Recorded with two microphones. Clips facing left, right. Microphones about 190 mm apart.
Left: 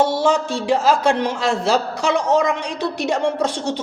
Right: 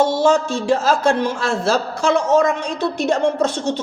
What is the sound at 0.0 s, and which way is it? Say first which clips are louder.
A man's voice: right 2 dB; 15° left (ahead or behind).